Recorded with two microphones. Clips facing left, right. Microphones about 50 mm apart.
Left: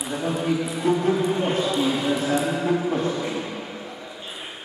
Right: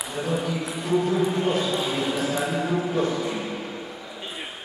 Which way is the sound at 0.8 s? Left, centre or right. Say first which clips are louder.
Even; left.